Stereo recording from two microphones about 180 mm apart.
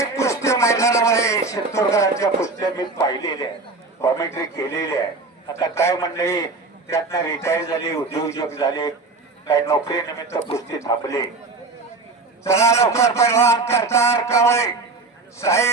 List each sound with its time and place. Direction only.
0.0 s a man's voice: 15° left (ahead or behind)
12.4 s a man's voice: 15° left (ahead or behind)